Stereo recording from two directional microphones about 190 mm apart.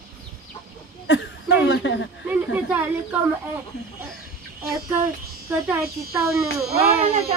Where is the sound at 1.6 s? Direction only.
70° left (ahead or behind).